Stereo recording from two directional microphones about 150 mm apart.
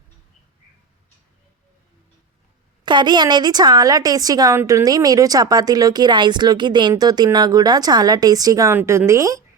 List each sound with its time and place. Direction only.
2.8 s a woman's voice: 30° right (ahead or behind)